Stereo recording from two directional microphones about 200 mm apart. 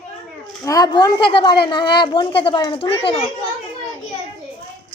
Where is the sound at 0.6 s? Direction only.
20° left (ahead or behind).